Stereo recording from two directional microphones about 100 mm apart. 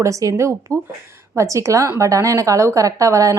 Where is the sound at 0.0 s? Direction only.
35° right (ahead or behind).